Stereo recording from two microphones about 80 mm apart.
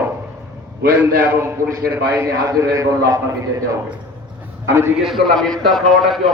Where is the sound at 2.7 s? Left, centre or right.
Right.